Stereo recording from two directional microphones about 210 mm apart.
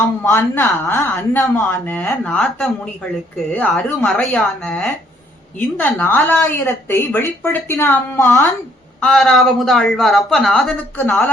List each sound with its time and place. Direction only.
0.2 s speech: 10° left (ahead or behind)